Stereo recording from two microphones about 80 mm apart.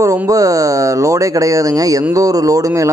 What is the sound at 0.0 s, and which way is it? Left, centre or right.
Speech, right.